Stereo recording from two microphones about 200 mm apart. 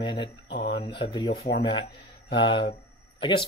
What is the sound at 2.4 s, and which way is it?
Speech, 25° left (ahead or behind).